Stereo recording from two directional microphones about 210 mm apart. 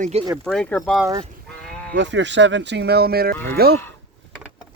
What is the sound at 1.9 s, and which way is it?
Speech, 60° right (ahead or behind).